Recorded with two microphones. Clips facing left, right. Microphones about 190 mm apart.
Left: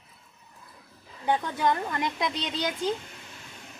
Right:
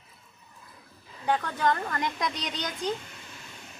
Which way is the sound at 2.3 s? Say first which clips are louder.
Left 2 dB; 30° left (ahead or behind).